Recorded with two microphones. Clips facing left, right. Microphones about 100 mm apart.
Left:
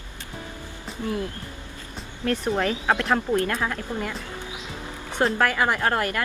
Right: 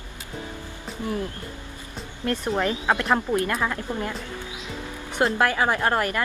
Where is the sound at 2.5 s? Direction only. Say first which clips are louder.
Right 1 dB; 15° right (ahead or behind).